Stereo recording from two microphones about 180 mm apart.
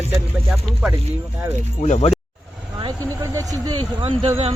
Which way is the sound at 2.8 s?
20° right (ahead or behind).